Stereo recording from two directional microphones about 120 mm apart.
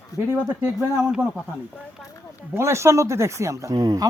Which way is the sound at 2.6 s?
20° right (ahead or behind).